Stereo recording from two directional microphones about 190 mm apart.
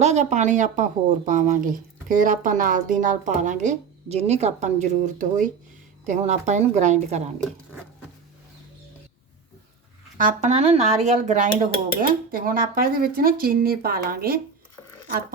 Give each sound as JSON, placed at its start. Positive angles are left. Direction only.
{"t": 0.0, "sound": "speech", "side_deg": -35}
{"t": 10.2, "sound": "speech", "side_deg": -40}